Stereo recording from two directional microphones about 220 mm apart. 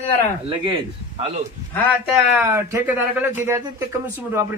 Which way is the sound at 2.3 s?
10° right (ahead or behind).